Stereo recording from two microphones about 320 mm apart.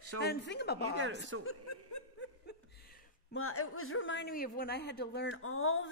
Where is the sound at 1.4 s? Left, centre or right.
Left.